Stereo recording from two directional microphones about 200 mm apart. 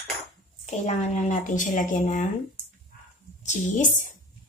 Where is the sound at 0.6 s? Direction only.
35° left (ahead or behind).